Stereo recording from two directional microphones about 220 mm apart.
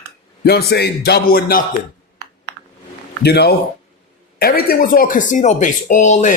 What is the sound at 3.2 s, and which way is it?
Speech, 45° left (ahead or behind).